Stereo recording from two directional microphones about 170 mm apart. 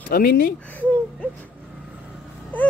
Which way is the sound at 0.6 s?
10° left (ahead or behind).